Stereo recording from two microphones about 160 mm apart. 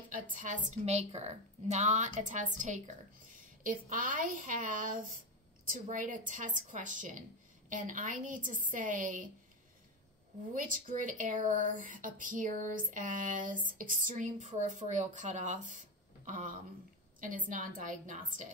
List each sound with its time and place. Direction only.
0.1 s a woman's voice: 55° right (ahead or behind)
3.9 s a woman's voice: 60° right (ahead or behind)
10.5 s speech: 55° right (ahead or behind)